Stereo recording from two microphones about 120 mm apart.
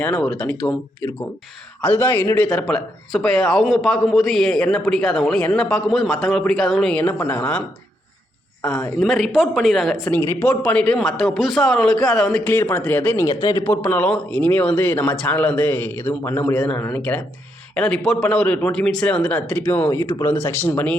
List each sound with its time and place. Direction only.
0.0 s a man's voice: 10° left (ahead or behind)
9.0 s speech: centre (ahead or behind)
10.1 s a man's voice: 15° left (ahead or behind)
13.4 s a man's voice: 30° left (ahead or behind)
13.7 s a man's voice: 15° left (ahead or behind)
19.9 s a man's voice: 25° left (ahead or behind)